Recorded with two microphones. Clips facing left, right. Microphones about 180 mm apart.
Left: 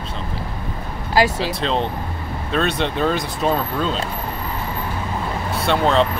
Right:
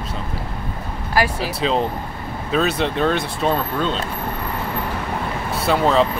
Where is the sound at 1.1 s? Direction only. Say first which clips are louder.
Left 3 dB; 25° left (ahead or behind).